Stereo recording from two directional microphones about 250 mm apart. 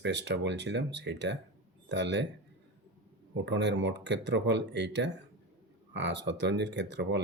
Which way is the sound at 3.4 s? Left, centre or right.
Right.